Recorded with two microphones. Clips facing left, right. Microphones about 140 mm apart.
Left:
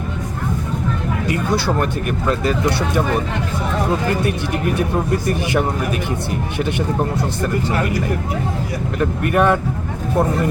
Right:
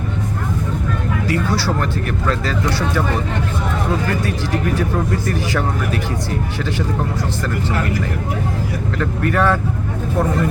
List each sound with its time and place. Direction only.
1.3 s speech: 20° left (ahead or behind)
4.8 s speech: 15° left (ahead or behind)
9.0 s speech: 20° left (ahead or behind)